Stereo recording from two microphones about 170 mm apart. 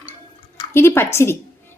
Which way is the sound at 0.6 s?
15° left (ahead or behind).